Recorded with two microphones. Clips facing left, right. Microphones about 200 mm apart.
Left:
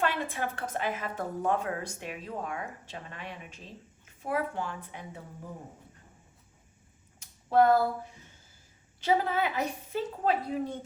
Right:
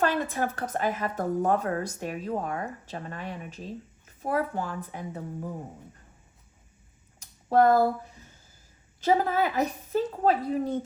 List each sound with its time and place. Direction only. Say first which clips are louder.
0.0 s a woman's voice: right 4 dB; 40° right (ahead or behind)
7.2 s a sound: right 2 dB; 45° right (ahead or behind)
9.0 s a woman's voice: right 3 dB; 45° right (ahead or behind)